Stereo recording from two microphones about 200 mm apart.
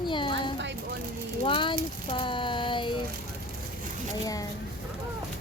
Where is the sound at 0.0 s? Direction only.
25° left (ahead or behind).